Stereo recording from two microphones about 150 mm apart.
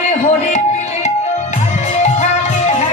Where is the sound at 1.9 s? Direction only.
50° left (ahead or behind).